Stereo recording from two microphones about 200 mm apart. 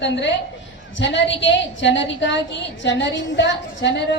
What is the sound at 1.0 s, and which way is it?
A woman's voice, 65° left (ahead or behind).